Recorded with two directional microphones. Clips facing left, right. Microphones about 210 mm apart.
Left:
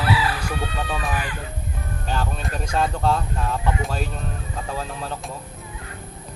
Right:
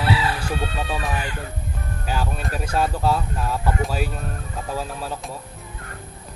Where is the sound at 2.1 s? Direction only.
5° right (ahead or behind).